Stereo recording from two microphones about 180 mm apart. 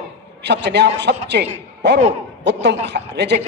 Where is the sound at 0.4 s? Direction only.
70° right (ahead or behind).